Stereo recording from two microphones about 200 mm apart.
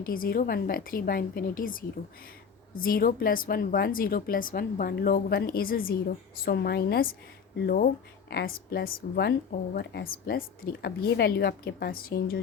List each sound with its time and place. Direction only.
0.0 s a woman's voice: 45° left (ahead or behind)
8.3 s a woman's voice: 50° left (ahead or behind)